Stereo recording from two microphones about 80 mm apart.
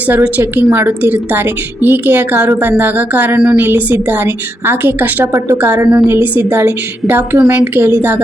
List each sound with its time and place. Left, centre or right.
0.1 s a woman's voice: right